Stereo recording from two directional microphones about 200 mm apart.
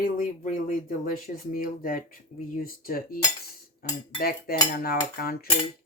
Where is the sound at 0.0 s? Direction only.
45° left (ahead or behind).